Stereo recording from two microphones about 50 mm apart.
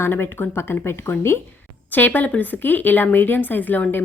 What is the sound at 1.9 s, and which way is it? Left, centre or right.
Speech, left.